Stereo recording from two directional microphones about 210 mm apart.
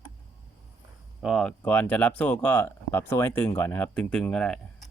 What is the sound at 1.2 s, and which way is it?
Speech, centre (ahead or behind).